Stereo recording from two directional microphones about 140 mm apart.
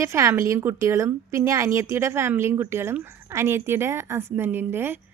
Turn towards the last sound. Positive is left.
turn(degrees=-15)  # may be behind; listen again after turning